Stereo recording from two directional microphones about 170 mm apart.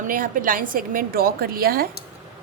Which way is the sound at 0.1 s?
55° right (ahead or behind).